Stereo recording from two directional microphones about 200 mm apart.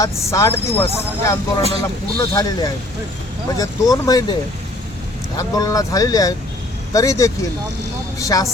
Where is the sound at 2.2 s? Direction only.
20° left (ahead or behind).